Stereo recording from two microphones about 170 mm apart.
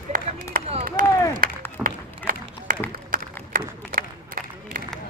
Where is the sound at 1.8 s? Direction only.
55° right (ahead or behind).